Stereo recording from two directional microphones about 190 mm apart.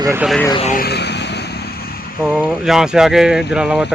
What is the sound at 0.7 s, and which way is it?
Vehicle, 60° left (ahead or behind).